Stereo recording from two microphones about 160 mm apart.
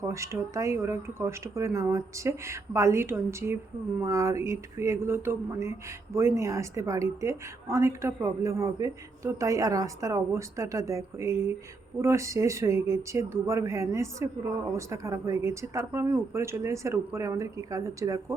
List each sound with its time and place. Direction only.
0.1 s a woman's voice: 15° right (ahead or behind)